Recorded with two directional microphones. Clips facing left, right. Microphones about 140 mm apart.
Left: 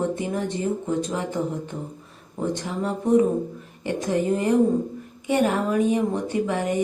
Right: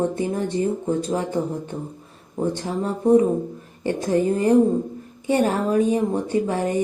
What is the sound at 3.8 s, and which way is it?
Speech, 35° right (ahead or behind).